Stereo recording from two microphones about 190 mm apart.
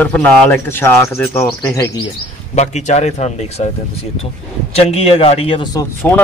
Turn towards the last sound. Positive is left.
turn(degrees=10)  # may be behind; listen again after turning